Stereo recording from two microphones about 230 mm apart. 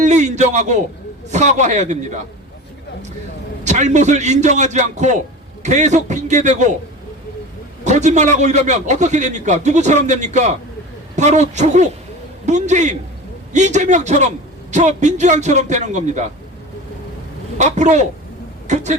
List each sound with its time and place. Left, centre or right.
0.0 s a sound: right
1.3 s a man's voice: right
3.6 s a man's voice: right
7.9 s a man's voice: right
17.6 s a man's voice: right